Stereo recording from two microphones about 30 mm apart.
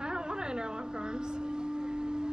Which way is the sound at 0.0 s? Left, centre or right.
Right.